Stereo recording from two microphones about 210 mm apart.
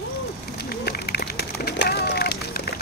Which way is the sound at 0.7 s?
50° left (ahead or behind).